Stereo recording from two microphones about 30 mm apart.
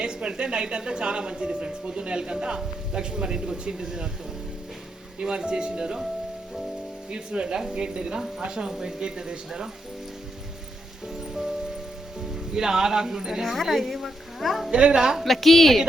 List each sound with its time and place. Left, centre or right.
0.0 s a woman's voice: right
5.2 s a woman's voice: right
7.1 s a woman's voice: right
12.3 s speech: centre
13.5 s a woman's voice: centre
14.7 s a woman's voice: right
15.2 s a woman's voice: centre